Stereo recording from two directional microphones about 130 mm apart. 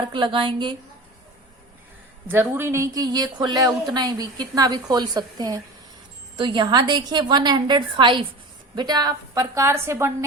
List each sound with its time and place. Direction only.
0.0 s speech: 40° right (ahead or behind)
2.3 s a woman's voice: 15° right (ahead or behind)